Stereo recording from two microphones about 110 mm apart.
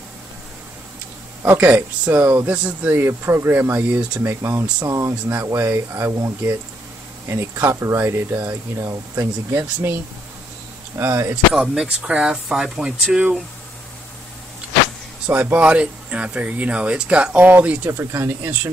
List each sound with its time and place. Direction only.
1.4 s speech: 15° right (ahead or behind)
11.0 s speech: 25° right (ahead or behind)
11.5 s speech: 5° right (ahead or behind)
15.2 s speech: 15° right (ahead or behind)